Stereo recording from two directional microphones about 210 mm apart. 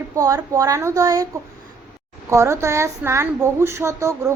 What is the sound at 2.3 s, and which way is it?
A woman's voice, 15° right (ahead or behind).